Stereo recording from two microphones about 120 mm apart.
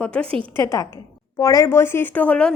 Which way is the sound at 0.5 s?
25° left (ahead or behind).